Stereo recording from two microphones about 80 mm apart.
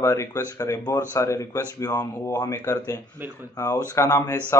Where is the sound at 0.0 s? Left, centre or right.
Left.